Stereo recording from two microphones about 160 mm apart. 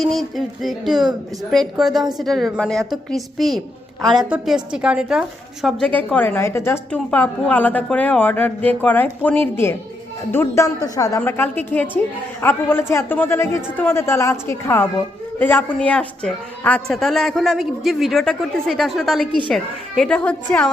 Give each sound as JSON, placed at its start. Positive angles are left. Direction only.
{"t": 0.0, "sound": "a woman's voice", "side_deg": 0}
{"t": 5.6, "sound": "a woman's voice", "side_deg": 10}